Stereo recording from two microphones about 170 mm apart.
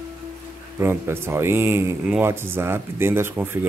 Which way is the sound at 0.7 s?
15° right (ahead or behind).